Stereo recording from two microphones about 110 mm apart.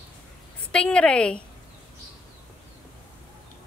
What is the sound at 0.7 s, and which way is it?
Speech, 10° left (ahead or behind).